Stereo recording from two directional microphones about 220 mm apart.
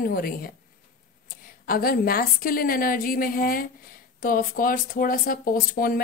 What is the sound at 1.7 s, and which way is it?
Speech, 40° left (ahead or behind).